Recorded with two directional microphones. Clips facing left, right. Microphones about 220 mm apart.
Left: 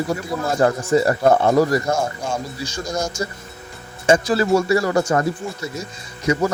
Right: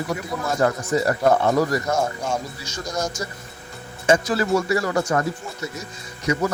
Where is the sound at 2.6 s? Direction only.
30° left (ahead or behind).